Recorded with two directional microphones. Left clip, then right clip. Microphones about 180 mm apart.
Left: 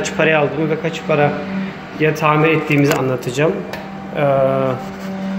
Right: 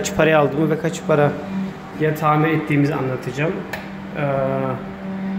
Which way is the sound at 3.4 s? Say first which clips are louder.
Left 7 dB; 20° left (ahead or behind).